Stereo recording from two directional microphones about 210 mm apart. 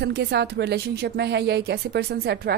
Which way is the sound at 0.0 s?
50° right (ahead or behind).